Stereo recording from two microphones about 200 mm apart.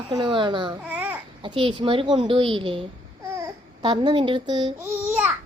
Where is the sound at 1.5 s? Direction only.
25° right (ahead or behind).